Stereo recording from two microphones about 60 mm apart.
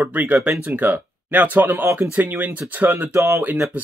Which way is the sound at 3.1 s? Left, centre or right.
Right.